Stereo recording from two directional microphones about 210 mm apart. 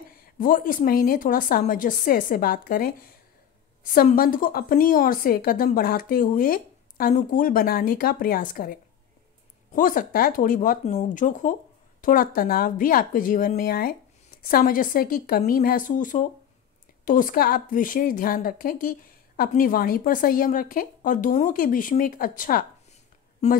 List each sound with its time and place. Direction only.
0.2 s a woman's voice: 40° left (ahead or behind)